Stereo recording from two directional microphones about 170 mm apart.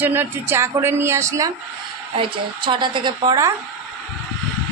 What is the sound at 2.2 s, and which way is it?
A woman's voice, 30° right (ahead or behind).